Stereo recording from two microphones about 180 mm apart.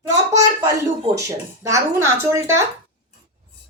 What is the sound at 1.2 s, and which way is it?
Speech, 15° right (ahead or behind).